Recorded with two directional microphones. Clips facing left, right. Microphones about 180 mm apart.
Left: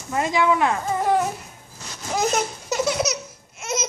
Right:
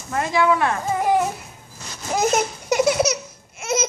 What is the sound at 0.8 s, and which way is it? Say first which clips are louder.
Babbling: right 4 dB; 10° right (ahead or behind).